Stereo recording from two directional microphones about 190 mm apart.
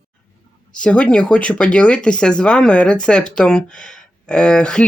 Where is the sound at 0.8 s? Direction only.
5° left (ahead or behind).